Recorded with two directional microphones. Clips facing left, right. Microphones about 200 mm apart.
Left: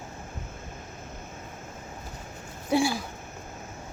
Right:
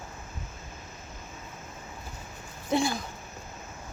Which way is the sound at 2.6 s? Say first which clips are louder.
Left 2 dB; 10° left (ahead or behind).